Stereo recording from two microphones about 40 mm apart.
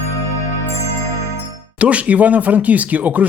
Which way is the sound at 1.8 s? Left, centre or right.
Right.